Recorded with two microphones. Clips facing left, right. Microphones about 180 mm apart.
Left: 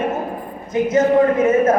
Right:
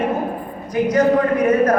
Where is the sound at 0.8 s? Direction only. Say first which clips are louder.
Left 1 dB; 25° left (ahead or behind).